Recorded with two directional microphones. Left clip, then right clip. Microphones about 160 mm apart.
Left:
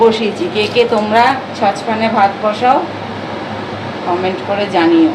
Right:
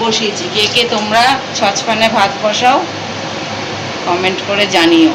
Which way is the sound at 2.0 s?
5° left (ahead or behind).